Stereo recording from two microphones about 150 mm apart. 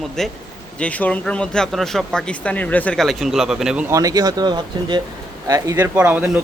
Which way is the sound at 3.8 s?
20° right (ahead or behind).